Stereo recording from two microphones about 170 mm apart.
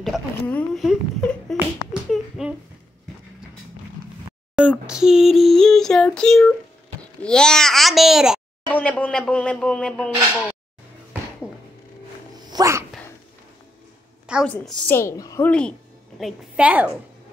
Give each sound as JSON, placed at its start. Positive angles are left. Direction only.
{"t": 0.0, "sound": "speech", "side_deg": 5}
{"t": 2.0, "sound": "a sound", "side_deg": -5}
{"t": 4.6, "sound": "female singing", "side_deg": -5}
{"t": 7.0, "sound": "a child's voice", "side_deg": 5}
{"t": 12.4, "sound": "dog", "side_deg": -20}
{"t": 14.2, "sound": "a sound", "side_deg": -5}
{"t": 14.5, "sound": "a man's voice", "side_deg": 10}
{"t": 15.4, "sound": "a woman's voice", "side_deg": 5}